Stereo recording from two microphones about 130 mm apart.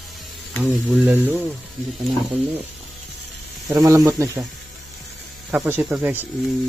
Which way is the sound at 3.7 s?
30° right (ahead or behind).